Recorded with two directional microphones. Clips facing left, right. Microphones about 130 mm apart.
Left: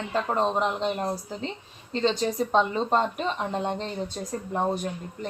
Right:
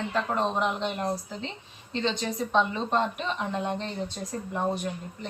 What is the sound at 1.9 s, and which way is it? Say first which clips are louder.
A woman's voice: left 4 dB; 40° left (ahead or behind).